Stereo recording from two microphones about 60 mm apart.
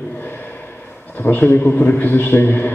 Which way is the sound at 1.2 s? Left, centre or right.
Left.